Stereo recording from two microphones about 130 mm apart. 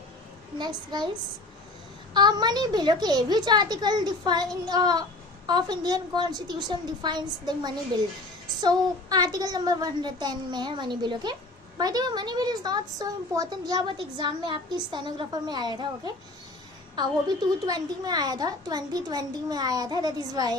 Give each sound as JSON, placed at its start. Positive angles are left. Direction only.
{"t": 0.6, "sound": "a woman's voice", "side_deg": -35}
{"t": 2.1, "sound": "a woman's voice", "side_deg": -35}
{"t": 17.7, "sound": "a child's voice", "side_deg": -30}